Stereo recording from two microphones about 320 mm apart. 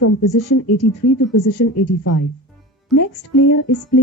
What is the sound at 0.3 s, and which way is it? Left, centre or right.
Music, left.